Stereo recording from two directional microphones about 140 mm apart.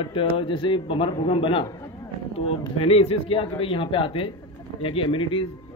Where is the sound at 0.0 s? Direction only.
40° left (ahead or behind).